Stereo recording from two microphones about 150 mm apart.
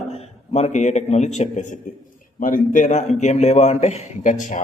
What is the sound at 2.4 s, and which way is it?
A man's voice, 65° left (ahead or behind).